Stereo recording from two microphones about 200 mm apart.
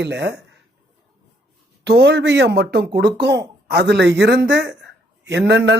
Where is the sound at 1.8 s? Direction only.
60° right (ahead or behind).